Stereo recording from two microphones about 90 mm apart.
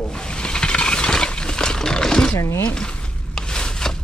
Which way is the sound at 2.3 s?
35° left (ahead or behind).